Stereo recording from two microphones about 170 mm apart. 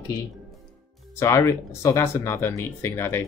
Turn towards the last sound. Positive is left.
turn(degrees=15)  # may be behind; listen again after turning